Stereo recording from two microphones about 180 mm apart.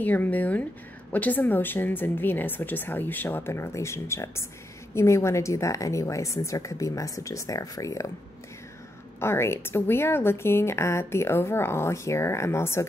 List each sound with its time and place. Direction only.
0.0 s speech: 10° left (ahead or behind)
9.2 s speech: 15° left (ahead or behind)